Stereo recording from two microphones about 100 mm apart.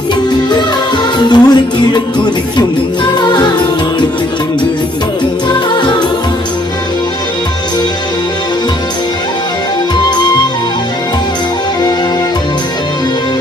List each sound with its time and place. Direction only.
1.3 s music: 45° left (ahead or behind)
5.5 s music: 50° left (ahead or behind)